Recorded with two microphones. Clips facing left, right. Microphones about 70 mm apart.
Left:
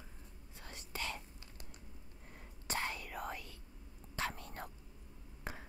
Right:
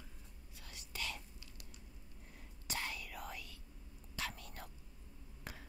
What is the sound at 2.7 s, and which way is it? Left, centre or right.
Whispering, left.